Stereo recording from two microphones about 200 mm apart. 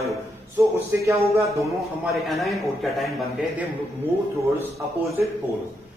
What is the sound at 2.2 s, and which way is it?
A man's voice, centre (ahead or behind).